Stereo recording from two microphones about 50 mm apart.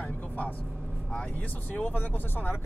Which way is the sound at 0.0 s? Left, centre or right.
Left.